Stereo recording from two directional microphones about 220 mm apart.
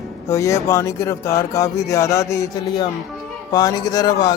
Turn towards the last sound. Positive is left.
turn(degrees=20)  # may be behind; listen again after turning